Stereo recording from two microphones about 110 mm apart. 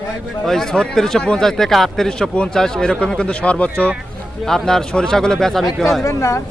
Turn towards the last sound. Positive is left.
turn(degrees=30)  # may be behind; listen again after turning